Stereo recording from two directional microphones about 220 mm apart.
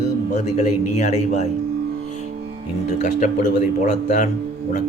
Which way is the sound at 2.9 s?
35° left (ahead or behind).